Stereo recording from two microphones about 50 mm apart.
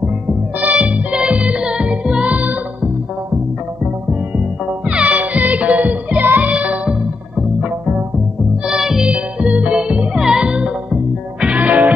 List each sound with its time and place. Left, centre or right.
0.3 s music: right
4.4 s music: right
6.5 s music: right
8.6 s music: centre
9.8 s music: centre; by 11.9 s right